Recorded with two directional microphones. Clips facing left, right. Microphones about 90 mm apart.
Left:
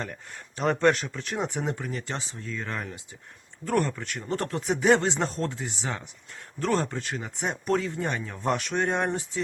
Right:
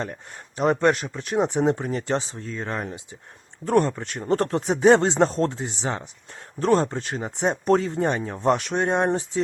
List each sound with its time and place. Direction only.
0.0 s speech: 25° right (ahead or behind)